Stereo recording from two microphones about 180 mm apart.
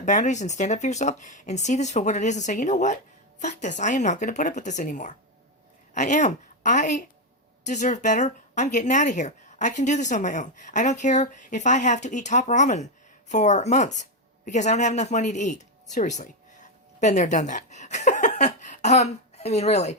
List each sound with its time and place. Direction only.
0.0 s a woman's voice: 45° left (ahead or behind)